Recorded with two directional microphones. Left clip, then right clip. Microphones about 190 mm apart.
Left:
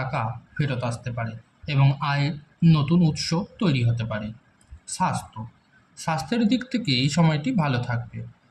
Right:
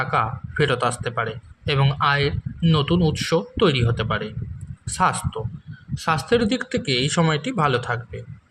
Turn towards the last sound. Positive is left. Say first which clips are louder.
# right 5 dB
turn(degrees=-30)  # may be behind; listen again after turning